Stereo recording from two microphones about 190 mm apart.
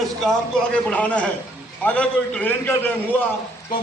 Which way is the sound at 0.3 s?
5° left (ahead or behind).